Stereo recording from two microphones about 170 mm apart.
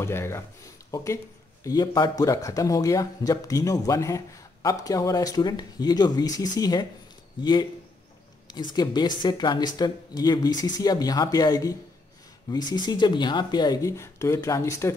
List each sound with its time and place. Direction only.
0.0 s speech: 15° left (ahead or behind)
8.5 s speech: 25° left (ahead or behind)